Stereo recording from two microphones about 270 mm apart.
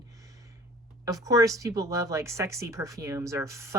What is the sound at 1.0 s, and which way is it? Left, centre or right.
A woman's voice, centre.